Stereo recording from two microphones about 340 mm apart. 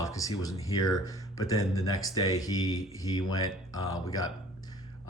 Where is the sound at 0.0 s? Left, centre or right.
Centre.